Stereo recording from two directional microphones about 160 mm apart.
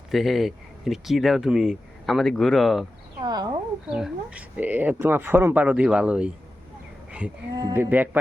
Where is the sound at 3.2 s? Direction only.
25° right (ahead or behind).